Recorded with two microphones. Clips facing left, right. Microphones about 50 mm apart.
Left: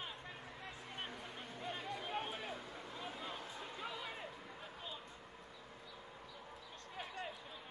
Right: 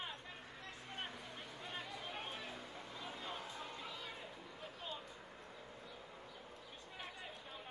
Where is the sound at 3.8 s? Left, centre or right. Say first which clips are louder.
Left 3 dB; centre.